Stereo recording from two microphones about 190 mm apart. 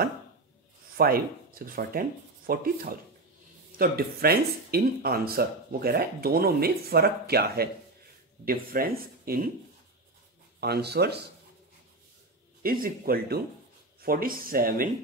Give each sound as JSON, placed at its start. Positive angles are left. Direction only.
{"t": 0.9, "sound": "speech", "side_deg": -50}
{"t": 10.6, "sound": "speech", "side_deg": -60}
{"t": 12.6, "sound": "speech", "side_deg": -50}